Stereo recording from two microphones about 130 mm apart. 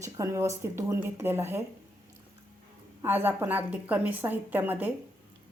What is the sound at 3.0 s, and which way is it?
A woman's voice, 15° right (ahead or behind).